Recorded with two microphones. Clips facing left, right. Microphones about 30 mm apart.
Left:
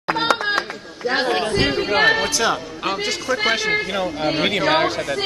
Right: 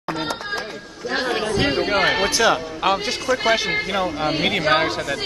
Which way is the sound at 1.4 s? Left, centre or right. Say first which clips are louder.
Left 1 dB; left.